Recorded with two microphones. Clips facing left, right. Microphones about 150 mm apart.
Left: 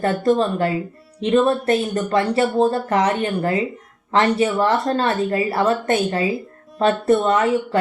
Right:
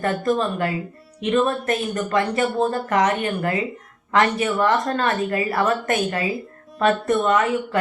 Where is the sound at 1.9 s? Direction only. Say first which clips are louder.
Left 2 dB; 20° left (ahead or behind).